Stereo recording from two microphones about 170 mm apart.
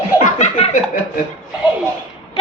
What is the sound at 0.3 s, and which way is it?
Laughter, 40° left (ahead or behind).